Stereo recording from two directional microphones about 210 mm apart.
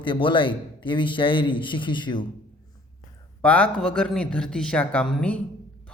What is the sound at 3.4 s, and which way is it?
A man's voice, 5° left (ahead or behind).